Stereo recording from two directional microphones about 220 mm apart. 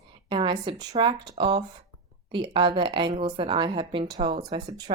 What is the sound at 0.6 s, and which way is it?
A woman's voice, 20° right (ahead or behind).